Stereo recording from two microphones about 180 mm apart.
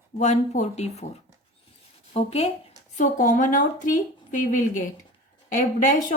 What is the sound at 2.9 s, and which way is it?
Speech, 45° left (ahead or behind).